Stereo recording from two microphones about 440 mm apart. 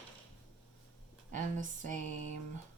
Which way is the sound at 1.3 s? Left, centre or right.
Centre.